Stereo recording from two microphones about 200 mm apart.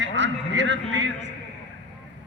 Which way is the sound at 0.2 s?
65° right (ahead or behind).